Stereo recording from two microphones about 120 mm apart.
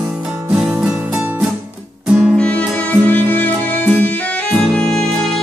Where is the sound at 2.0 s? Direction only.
5° right (ahead or behind).